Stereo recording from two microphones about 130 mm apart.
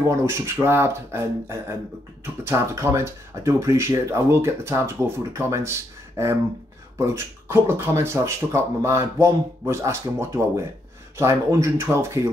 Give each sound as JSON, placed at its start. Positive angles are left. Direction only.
{"t": 0.2, "sound": "speech", "side_deg": -20}